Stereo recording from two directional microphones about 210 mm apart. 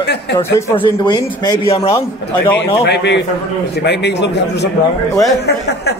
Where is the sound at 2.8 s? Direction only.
55° left (ahead or behind).